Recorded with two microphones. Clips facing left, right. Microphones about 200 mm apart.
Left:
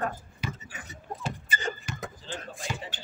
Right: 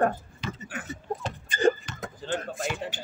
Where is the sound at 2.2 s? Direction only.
55° right (ahead or behind).